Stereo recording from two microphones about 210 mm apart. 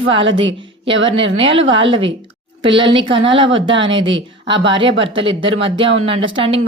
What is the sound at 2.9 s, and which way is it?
Speech, 60° right (ahead or behind).